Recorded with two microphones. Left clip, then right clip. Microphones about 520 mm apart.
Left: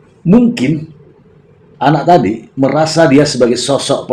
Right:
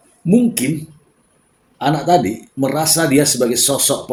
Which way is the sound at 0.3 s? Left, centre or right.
Right.